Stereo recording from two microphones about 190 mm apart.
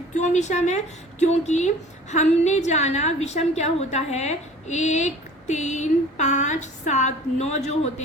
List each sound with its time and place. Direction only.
0.1 s a woman's voice: 40° left (ahead or behind)